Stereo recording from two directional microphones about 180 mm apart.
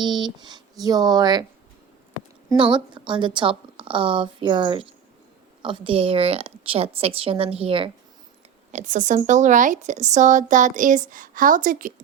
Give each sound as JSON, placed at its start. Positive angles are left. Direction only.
{"t": 0.0, "sound": "a woman's voice", "side_deg": -25}
{"t": 2.5, "sound": "a woman's voice", "side_deg": -25}
{"t": 8.7, "sound": "speech", "side_deg": -45}